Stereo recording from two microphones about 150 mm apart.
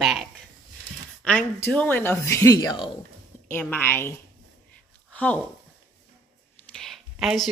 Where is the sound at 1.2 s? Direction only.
10° left (ahead or behind).